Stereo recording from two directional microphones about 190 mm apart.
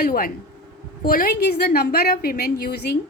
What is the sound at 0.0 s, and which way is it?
A woman's voice, 50° left (ahead or behind).